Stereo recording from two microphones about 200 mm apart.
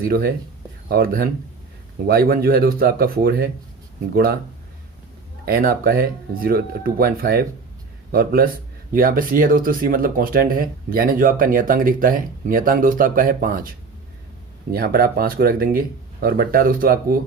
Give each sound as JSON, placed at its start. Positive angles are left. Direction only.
{"t": 0.0, "sound": "speech", "side_deg": -50}
{"t": 5.5, "sound": "speech", "side_deg": -50}
{"t": 14.7, "sound": "speech", "side_deg": -50}